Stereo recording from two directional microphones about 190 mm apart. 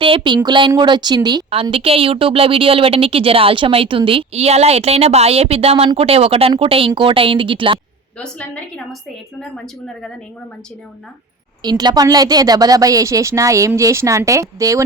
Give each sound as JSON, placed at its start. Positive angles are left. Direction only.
{"t": 0.0, "sound": "a sound", "side_deg": -25}
{"t": 0.4, "sound": "speech", "side_deg": -25}
{"t": 8.2, "sound": "a woman's voice", "side_deg": 5}
{"t": 11.6, "sound": "a woman's voice", "side_deg": -20}